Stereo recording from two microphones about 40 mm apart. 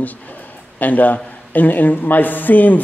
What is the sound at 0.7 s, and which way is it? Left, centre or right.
A man's voice, left.